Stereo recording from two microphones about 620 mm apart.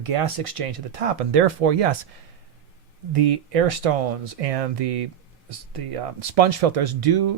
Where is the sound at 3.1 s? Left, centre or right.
Right.